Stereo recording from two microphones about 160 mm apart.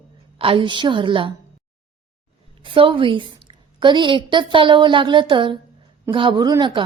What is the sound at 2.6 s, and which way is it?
A woman's voice, 30° right (ahead or behind).